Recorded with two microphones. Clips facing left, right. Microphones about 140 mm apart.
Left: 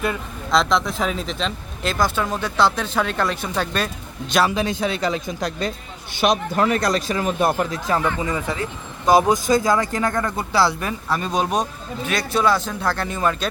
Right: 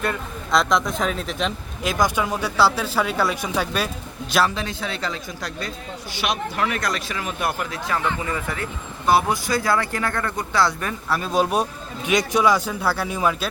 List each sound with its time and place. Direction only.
0.0 s speech: centre (ahead or behind)
4.4 s a man's voice: 15° left (ahead or behind)
6.1 s speech: 45° left (ahead or behind)
8.2 s a man's voice: 15° left (ahead or behind)
10.3 s speech: 30° left (ahead or behind)
10.7 s a man's voice: 10° left (ahead or behind)
11.1 s speech: 5° right (ahead or behind)